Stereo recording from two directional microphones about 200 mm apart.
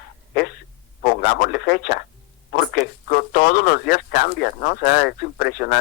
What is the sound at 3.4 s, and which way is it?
Speech, 50° left (ahead or behind).